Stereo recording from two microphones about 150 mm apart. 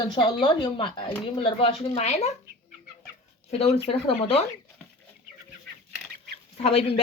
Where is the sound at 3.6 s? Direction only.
40° left (ahead or behind).